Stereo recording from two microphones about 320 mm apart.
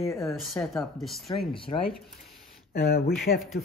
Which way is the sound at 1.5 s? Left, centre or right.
Centre.